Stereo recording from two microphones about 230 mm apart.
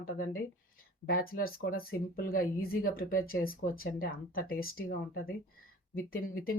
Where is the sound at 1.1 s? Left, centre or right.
Left.